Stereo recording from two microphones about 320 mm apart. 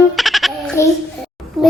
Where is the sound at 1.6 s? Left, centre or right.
Centre.